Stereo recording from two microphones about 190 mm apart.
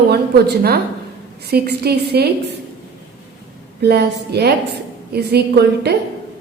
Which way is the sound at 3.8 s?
60° right (ahead or behind).